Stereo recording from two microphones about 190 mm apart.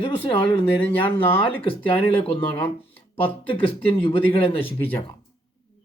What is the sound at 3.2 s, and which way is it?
Speech, 30° left (ahead or behind).